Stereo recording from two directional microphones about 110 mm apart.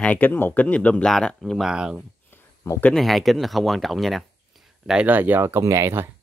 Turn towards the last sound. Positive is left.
turn(degrees=-25)  # may be behind; listen again after turning